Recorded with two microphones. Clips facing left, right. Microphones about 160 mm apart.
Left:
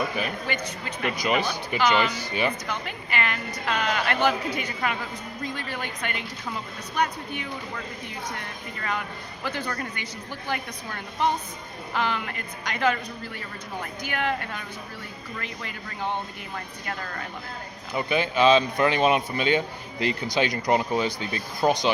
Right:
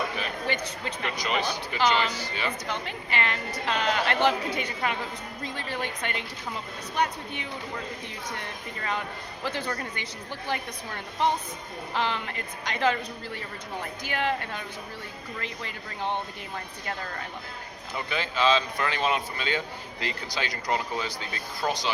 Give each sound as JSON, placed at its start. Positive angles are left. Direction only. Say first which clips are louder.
{"t": 0.4, "sound": "speech", "louder": "even", "side_deg": -30}
{"t": 1.0, "sound": "speech", "louder": "left 4 dB", "side_deg": 10}
{"t": 2.6, "sound": "a woman's voice", "louder": "even", "side_deg": -25}
{"t": 8.8, "sound": "a woman's voice", "louder": "left 1 dB", "side_deg": -25}
{"t": 14.0, "sound": "a woman's voice", "louder": "left 1 dB", "side_deg": -25}
{"t": 17.9, "sound": "speech", "louder": "left 6 dB", "side_deg": 15}